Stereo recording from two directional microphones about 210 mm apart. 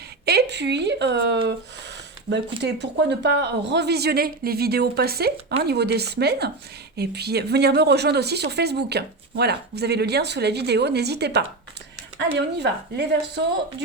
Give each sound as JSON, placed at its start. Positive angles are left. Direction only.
{"t": 0.3, "sound": "a woman's voice", "side_deg": -50}